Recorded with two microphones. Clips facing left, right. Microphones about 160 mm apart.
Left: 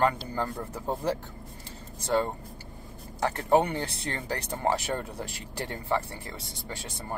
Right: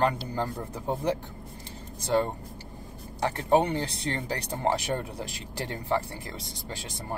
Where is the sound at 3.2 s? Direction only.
20° right (ahead or behind).